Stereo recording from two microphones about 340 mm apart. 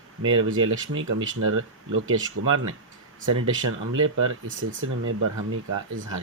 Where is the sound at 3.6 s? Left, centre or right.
Right.